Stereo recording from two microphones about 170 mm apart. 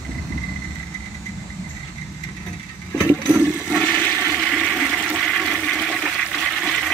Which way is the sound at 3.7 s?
5° left (ahead or behind).